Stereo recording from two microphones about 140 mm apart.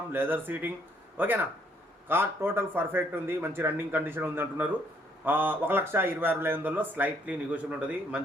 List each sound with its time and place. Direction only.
0.1 s a man's voice: 15° right (ahead or behind)